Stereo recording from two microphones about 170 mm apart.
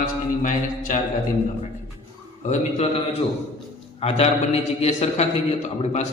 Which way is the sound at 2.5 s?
40° left (ahead or behind).